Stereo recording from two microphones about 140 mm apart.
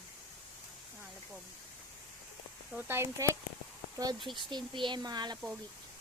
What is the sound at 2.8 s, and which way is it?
Speech, 15° right (ahead or behind).